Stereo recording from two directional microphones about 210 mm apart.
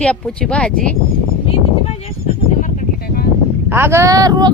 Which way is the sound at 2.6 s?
40° left (ahead or behind).